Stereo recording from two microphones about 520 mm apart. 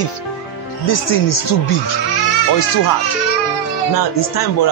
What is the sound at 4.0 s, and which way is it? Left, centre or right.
Speech, left.